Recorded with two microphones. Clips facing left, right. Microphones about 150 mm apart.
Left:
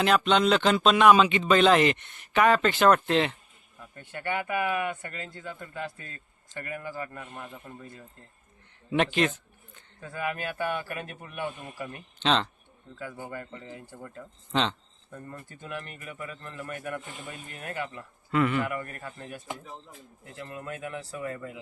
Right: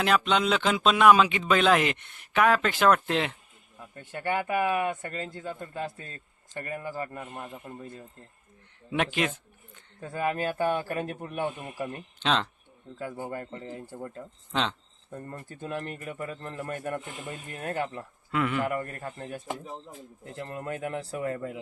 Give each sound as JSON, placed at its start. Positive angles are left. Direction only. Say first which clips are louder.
{"t": 0.0, "sound": "speech", "louder": "left 2 dB", "side_deg": -5}
{"t": 4.4, "sound": "a man's voice", "louder": "right 2 dB", "side_deg": -25}
{"t": 7.4, "sound": "speech", "louder": "right 2 dB", "side_deg": -10}
{"t": 8.9, "sound": "speech", "louder": "left 3 dB", "side_deg": -5}
{"t": 10.0, "sound": "speech", "louder": "right 4 dB", "side_deg": -35}
{"t": 11.6, "sound": "speech", "louder": "right 4 dB", "side_deg": -15}
{"t": 12.2, "sound": "speech", "louder": "left 2 dB", "side_deg": -5}
{"t": 13.0, "sound": "speech", "louder": "right 3 dB", "side_deg": -30}
{"t": 14.5, "sound": "speech", "louder": "left 2 dB", "side_deg": -5}
{"t": 15.1, "sound": "speech", "louder": "right 3 dB", "side_deg": -35}
{"t": 18.3, "sound": "speech", "louder": "left 3 dB", "side_deg": 0}
{"t": 18.6, "sound": "a man's voice", "louder": "right 3 dB", "side_deg": -35}